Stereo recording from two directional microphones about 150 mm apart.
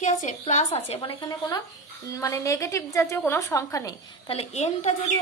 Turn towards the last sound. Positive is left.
turn(degrees=50)  # may be behind; listen again after turning